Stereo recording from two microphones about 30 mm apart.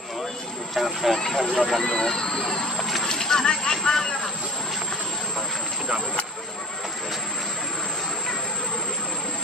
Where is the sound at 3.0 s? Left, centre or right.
Centre.